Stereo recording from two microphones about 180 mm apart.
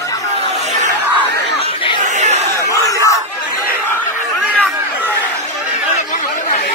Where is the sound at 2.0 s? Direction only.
40° right (ahead or behind).